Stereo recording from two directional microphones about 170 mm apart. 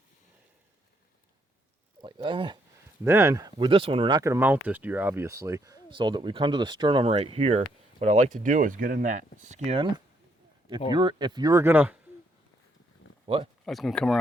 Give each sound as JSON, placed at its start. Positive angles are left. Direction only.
{"t": 2.0, "sound": "speech", "side_deg": -25}
{"t": 3.0, "sound": "speech", "side_deg": -15}
{"t": 9.7, "sound": "speech", "side_deg": -30}
{"t": 13.2, "sound": "speech", "side_deg": -30}
{"t": 13.7, "sound": "speech", "side_deg": 0}